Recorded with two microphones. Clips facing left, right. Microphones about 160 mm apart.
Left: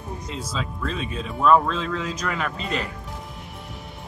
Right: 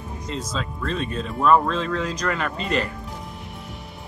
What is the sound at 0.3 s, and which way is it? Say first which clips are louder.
Speech: right 3 dB; 5° left (ahead or behind).